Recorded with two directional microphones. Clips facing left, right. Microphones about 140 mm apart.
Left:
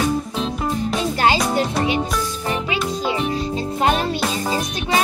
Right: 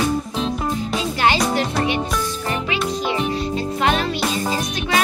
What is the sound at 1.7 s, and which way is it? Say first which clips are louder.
Music: left 1 dB; centre (ahead or behind).